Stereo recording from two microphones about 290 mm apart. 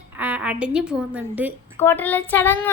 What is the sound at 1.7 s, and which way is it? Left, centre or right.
Speech, centre.